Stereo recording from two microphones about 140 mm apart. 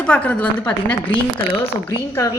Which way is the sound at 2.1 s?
20° left (ahead or behind).